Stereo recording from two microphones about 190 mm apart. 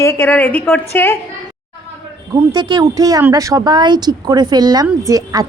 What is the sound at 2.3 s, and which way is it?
Speech, 20° right (ahead or behind).